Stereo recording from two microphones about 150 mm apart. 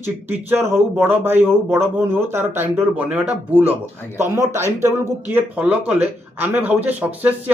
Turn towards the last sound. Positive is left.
turn(degrees=-10)  # may be behind; listen again after turning